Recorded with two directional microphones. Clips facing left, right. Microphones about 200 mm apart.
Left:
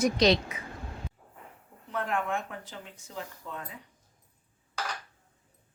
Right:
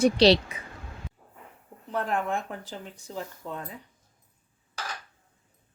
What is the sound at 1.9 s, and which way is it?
Speech, 35° right (ahead or behind).